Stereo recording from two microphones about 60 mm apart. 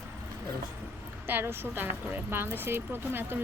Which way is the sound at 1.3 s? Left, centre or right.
Right.